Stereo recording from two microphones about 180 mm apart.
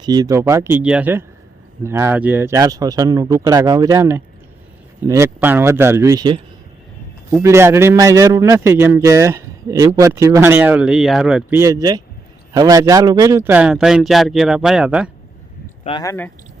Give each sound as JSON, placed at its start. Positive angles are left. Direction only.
{"t": 0.0, "sound": "a man's voice", "side_deg": -20}
{"t": 7.4, "sound": "a man's voice", "side_deg": -15}
{"t": 11.5, "sound": "speech", "side_deg": -15}
{"t": 16.0, "sound": "speech", "side_deg": 15}